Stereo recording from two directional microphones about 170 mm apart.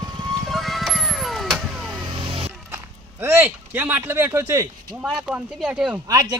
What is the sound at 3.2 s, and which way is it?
Speech, 15° right (ahead or behind).